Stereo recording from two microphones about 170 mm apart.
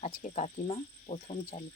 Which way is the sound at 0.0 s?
45° left (ahead or behind).